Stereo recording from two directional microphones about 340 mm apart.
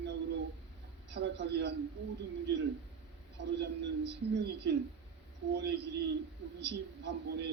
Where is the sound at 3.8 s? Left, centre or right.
Right.